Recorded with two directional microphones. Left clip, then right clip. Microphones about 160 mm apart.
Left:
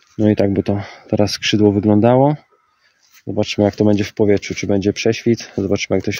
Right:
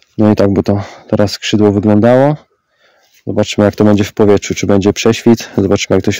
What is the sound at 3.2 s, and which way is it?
Speech, 50° right (ahead or behind).